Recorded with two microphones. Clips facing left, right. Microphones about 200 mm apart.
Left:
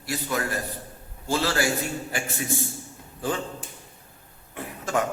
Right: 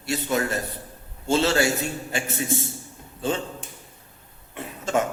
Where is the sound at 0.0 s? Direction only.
25° right (ahead or behind).